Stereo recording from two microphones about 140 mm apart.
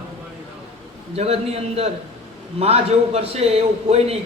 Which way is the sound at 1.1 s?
50° right (ahead or behind).